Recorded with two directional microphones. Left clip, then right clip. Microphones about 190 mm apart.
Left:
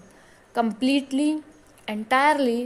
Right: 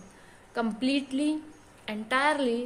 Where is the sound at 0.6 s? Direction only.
30° left (ahead or behind).